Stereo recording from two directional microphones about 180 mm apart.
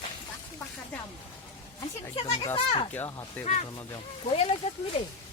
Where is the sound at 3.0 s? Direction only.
15° left (ahead or behind).